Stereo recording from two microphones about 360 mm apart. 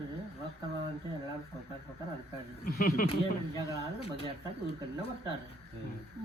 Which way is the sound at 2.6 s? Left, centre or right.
Left.